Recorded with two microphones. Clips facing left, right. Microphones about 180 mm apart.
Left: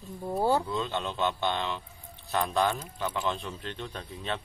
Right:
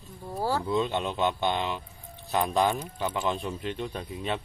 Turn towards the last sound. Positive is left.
turn(degrees=-10)  # may be behind; listen again after turning